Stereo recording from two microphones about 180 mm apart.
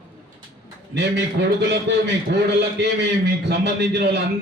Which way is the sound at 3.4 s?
70° right (ahead or behind).